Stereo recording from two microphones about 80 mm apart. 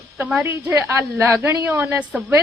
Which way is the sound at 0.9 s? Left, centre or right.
Right.